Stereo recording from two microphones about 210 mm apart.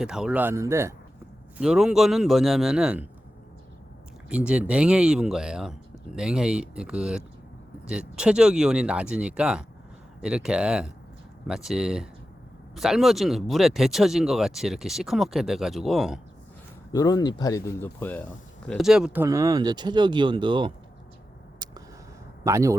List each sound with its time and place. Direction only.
0.0 s speech: 5° right (ahead or behind)
1.5 s speech: 5° right (ahead or behind)
4.3 s speech: 5° right (ahead or behind)
16.9 s speech: 15° left (ahead or behind); by 20.7 s 20° right (ahead or behind)
21.6 s a sound: 20° right (ahead or behind)
22.4 s speech: 15° right (ahead or behind)